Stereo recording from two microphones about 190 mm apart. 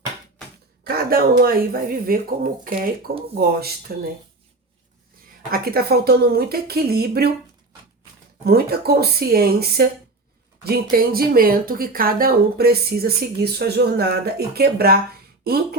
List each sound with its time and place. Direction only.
0.9 s speech: 50° right (ahead or behind)
5.5 s speech: 55° right (ahead or behind)
8.4 s speech: 55° right (ahead or behind)